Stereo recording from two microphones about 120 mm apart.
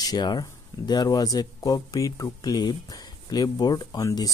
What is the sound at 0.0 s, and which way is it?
Speech, 35° left (ahead or behind).